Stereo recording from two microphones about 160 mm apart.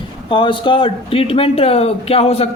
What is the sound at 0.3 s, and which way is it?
Speech, 30° left (ahead or behind).